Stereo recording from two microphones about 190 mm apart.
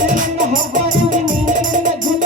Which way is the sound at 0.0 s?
45° right (ahead or behind).